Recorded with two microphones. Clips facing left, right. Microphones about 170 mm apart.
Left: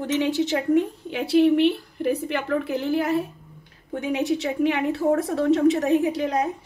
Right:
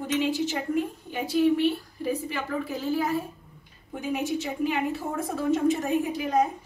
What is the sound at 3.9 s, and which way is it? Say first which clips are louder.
A woman's voice: left 4 dB; 75° left (ahead or behind).